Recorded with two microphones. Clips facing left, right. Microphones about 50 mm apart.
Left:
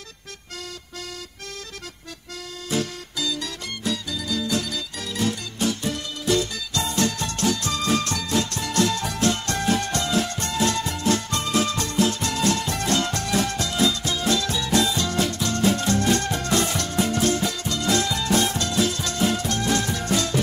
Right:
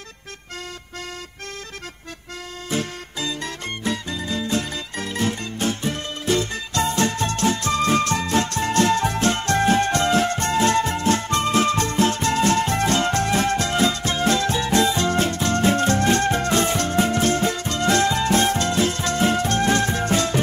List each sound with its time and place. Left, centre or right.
2.7 s music: right